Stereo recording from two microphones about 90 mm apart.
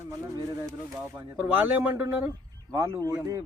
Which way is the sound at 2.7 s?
35° right (ahead or behind).